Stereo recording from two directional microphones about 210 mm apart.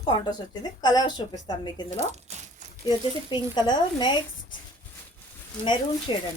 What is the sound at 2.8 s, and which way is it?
A woman's voice, 20° left (ahead or behind).